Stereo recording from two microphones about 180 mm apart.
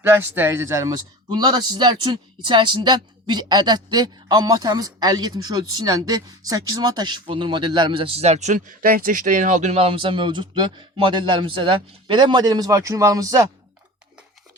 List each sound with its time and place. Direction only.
0.0 s speech: 15° right (ahead or behind)